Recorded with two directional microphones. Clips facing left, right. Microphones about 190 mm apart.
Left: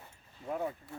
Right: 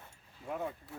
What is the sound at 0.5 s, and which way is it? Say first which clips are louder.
Speech: left 2 dB; 5° left (ahead or behind).